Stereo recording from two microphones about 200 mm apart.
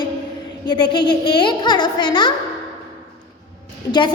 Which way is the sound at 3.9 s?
20° left (ahead or behind).